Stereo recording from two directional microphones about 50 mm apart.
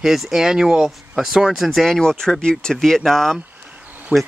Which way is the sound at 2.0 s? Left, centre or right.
Centre.